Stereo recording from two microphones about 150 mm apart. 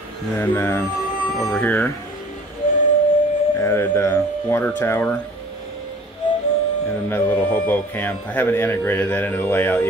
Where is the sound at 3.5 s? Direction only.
15° left (ahead or behind).